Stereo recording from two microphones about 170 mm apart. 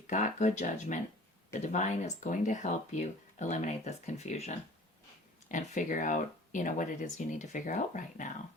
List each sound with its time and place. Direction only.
0.1 s speech: 45° left (ahead or behind)